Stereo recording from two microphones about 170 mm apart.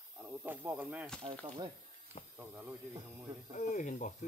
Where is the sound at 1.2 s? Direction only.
30° right (ahead or behind).